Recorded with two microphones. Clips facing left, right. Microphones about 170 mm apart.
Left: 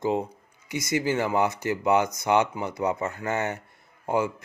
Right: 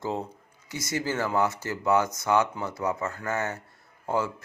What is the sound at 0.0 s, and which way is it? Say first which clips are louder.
Speech: left 5 dB; 15° left (ahead or behind).